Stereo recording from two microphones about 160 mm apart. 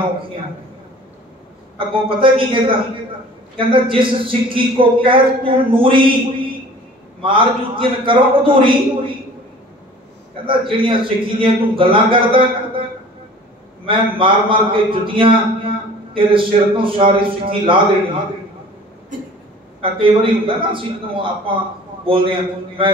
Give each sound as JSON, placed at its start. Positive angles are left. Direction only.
{"t": 1.8, "sound": "a man's voice", "side_deg": -35}
{"t": 7.2, "sound": "a man's voice", "side_deg": -35}
{"t": 10.3, "sound": "a man's voice", "side_deg": -30}
{"t": 13.8, "sound": "a man's voice", "side_deg": -30}
{"t": 19.8, "sound": "a man's voice", "side_deg": -30}